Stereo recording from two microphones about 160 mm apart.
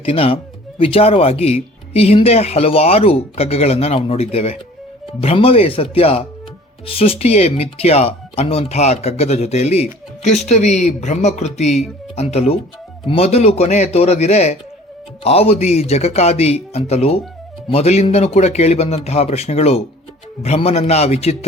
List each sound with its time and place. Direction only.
0.0 s speech: 35° left (ahead or behind)